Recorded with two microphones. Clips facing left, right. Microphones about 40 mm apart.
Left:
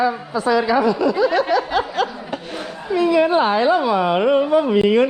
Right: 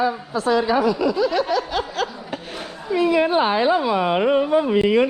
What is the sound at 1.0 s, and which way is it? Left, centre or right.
Speech, centre.